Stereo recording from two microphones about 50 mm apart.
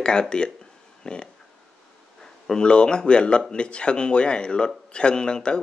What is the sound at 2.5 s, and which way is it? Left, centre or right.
Speech, centre.